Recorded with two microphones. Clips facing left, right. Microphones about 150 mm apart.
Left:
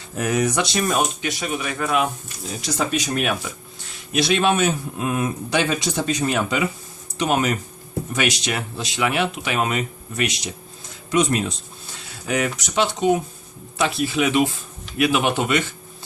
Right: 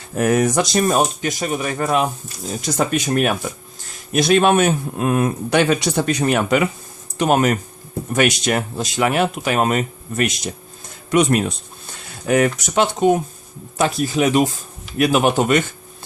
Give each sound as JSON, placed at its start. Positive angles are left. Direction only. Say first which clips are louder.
{"t": 0.2, "sound": "speech", "louder": "right 5 dB", "side_deg": -50}
{"t": 2.5, "sound": "speech", "louder": "right 4 dB", "side_deg": -50}